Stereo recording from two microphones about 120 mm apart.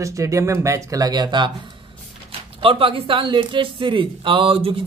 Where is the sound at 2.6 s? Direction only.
50° right (ahead or behind).